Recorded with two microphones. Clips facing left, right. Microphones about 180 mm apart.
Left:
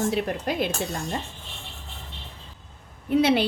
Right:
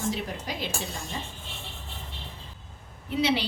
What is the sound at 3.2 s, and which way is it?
Speech, 55° left (ahead or behind).